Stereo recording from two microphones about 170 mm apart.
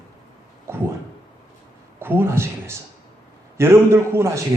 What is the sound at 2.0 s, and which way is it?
A man's voice, 15° right (ahead or behind).